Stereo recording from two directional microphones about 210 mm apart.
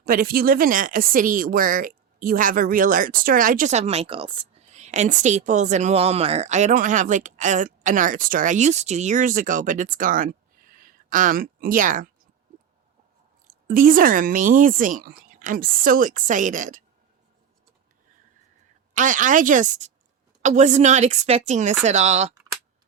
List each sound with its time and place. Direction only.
0.0 s speech: 45° right (ahead or behind)
13.7 s speech: 40° right (ahead or behind)
18.9 s speech: 40° right (ahead or behind)